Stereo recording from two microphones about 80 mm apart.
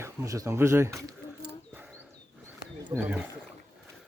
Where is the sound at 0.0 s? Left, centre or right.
Right.